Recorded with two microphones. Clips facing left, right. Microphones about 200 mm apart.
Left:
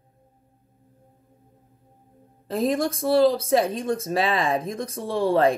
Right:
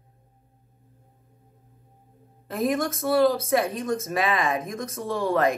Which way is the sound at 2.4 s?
30° left (ahead or behind).